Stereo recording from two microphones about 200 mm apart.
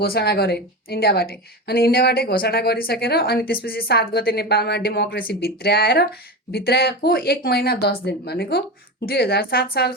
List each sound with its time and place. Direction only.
0.0 s a woman's voice: 50° left (ahead or behind)